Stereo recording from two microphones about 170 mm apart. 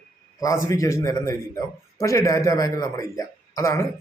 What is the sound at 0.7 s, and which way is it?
A man's voice, 15° left (ahead or behind).